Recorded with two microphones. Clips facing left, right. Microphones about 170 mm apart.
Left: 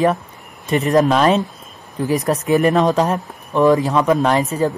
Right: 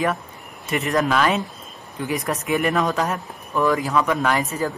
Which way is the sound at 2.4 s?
40° left (ahead or behind).